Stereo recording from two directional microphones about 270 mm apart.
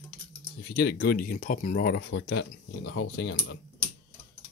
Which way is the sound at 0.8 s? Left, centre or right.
Left.